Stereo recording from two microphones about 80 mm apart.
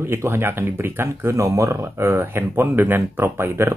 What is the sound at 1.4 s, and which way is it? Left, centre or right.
Speech, right.